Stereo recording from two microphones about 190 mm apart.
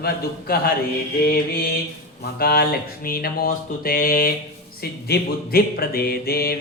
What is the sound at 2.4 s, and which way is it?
Music, 55° left (ahead or behind).